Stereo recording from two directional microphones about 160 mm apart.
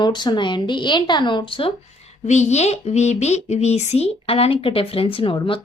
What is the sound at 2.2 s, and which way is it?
A woman's voice, 45° left (ahead or behind).